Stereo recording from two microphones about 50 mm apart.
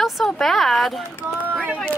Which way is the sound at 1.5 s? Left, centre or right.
Right.